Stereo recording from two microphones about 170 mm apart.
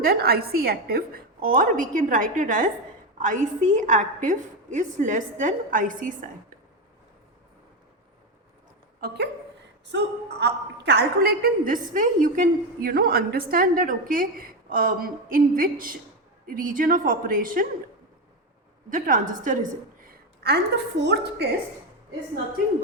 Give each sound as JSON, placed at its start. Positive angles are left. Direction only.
{"t": 0.0, "sound": "a woman's voice", "side_deg": -65}
{"t": 9.0, "sound": "a woman's voice", "side_deg": -65}
{"t": 9.9, "sound": "a woman's voice", "side_deg": -80}
{"t": 18.9, "sound": "a woman's voice", "side_deg": -55}
{"t": 20.1, "sound": "a woman's voice", "side_deg": -70}